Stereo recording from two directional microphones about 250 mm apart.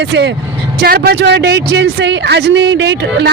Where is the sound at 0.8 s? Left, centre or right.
Right.